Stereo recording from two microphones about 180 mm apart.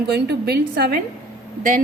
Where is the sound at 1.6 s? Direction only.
45° right (ahead or behind).